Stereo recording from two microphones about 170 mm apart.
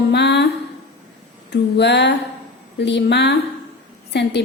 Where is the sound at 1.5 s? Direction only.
90° left.